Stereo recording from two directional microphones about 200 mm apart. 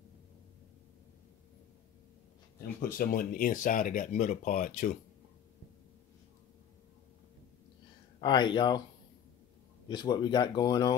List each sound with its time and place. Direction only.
2.6 s speech: 50° left (ahead or behind)
8.2 s speech: 20° left (ahead or behind)
9.8 s speech: 20° left (ahead or behind)